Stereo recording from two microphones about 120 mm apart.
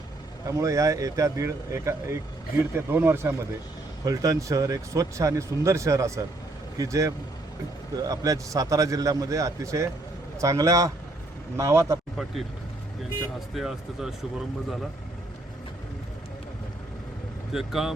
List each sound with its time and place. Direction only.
0.4 s speech: 25° right (ahead or behind)
12.1 s speech: centre (ahead or behind)
13.5 s speech: centre (ahead or behind)
17.5 s speech: 5° right (ahead or behind)